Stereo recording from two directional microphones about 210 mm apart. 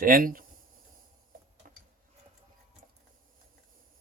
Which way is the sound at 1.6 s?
40° right (ahead or behind).